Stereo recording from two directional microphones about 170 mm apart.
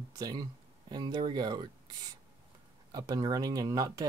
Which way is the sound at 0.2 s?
20° right (ahead or behind).